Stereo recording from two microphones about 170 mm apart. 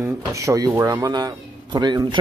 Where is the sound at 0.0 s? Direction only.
15° right (ahead or behind).